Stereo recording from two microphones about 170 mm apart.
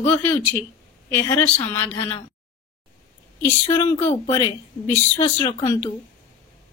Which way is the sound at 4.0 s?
15° left (ahead or behind).